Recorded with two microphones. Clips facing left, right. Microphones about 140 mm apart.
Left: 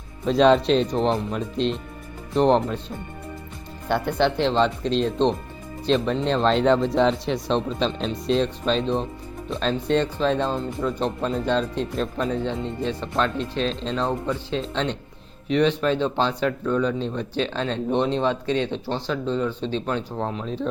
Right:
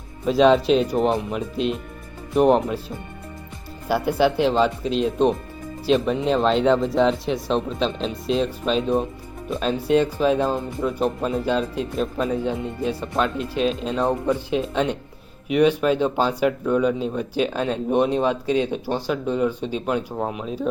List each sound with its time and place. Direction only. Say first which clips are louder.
0.3 s speech: right 1 dB; centre (ahead or behind)
3.8 s speech: right 2 dB; 5° right (ahead or behind)